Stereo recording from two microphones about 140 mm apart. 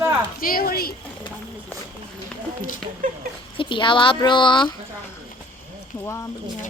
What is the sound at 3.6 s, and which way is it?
Speech, 35° left (ahead or behind).